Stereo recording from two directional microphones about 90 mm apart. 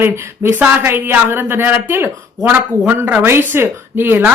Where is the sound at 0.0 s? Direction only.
25° right (ahead or behind).